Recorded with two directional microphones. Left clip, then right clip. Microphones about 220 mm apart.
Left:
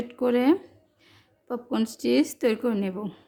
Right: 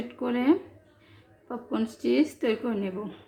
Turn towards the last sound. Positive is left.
turn(degrees=55)  # may be behind; listen again after turning